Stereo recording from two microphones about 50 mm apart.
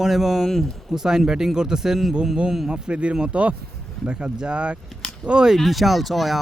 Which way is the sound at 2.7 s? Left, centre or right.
Centre.